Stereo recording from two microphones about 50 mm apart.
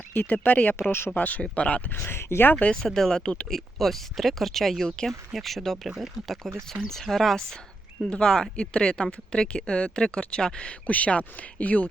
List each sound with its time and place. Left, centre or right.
0.1 s speech: left
0.8 s speech: left
1.2 s speech: left
1.9 s speech: left
2.5 s speech: left
2.7 s speech: centre; by 11.9 s left